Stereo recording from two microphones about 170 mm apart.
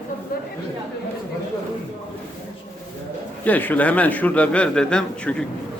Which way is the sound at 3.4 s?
10° left (ahead or behind).